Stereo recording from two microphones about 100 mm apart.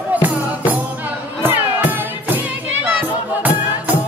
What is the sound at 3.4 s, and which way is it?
Music, 15° right (ahead or behind).